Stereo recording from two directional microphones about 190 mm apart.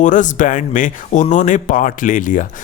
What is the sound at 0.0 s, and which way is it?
Speech, 40° left (ahead or behind).